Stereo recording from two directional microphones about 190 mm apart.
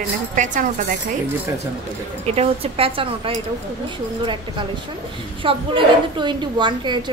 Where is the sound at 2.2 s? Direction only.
30° right (ahead or behind).